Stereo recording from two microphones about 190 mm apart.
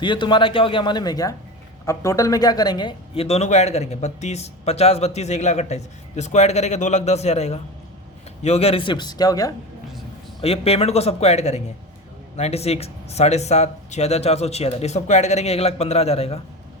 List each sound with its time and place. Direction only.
0.0 s a man's voice: 25° left (ahead or behind)
10.4 s speech: 30° left (ahead or behind)